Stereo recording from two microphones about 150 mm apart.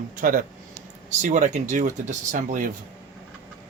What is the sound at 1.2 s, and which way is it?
Speech, 55° right (ahead or behind).